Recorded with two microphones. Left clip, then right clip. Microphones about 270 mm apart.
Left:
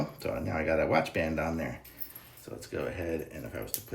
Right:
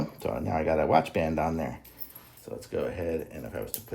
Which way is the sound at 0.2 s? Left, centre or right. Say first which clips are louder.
Right 6 dB; centre.